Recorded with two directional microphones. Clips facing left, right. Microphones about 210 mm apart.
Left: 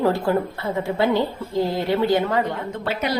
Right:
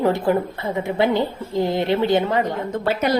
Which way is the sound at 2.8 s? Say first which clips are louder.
Right 5 dB; 45° right (ahead or behind).